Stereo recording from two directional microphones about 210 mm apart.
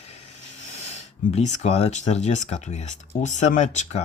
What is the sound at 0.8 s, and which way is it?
Speech, 30° left (ahead or behind).